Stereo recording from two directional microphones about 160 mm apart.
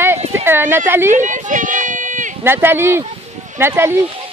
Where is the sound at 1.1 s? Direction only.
50° right (ahead or behind).